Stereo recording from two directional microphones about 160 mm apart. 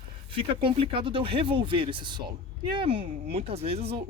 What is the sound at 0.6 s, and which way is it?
Speech, 35° right (ahead or behind).